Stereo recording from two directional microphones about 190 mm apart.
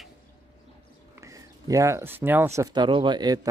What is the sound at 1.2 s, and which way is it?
Speech, 15° right (ahead or behind).